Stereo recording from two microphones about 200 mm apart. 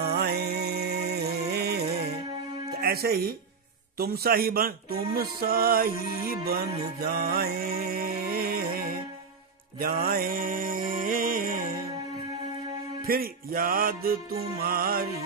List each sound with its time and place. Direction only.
0.0 s music: 55° right (ahead or behind)
2.8 s speech: 50° right (ahead or behind)
6.5 s music: 50° right (ahead or behind)
13.0 s speech: 45° right (ahead or behind)